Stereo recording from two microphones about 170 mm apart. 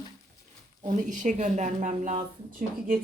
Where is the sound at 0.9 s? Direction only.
50° right (ahead or behind).